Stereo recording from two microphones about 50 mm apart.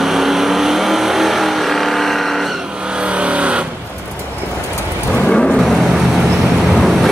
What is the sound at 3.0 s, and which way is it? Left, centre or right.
Vehicle, right.